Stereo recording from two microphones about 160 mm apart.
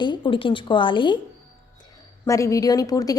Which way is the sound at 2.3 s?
20° left (ahead or behind).